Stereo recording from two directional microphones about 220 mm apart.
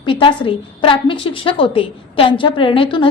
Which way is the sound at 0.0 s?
25° left (ahead or behind).